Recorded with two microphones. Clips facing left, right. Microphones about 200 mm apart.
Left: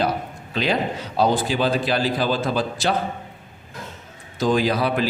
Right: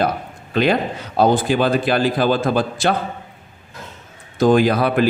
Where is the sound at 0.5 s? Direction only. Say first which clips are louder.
Right 5 dB; 55° right (ahead or behind).